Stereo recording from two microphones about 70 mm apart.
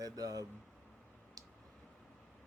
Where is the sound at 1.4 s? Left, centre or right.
Right.